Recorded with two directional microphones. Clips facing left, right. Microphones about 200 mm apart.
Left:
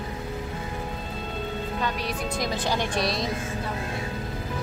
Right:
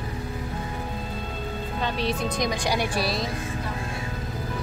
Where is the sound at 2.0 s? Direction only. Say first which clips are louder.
Right 3 dB; 25° right (ahead or behind).